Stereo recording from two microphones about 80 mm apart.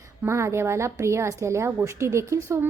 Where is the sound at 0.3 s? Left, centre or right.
Right.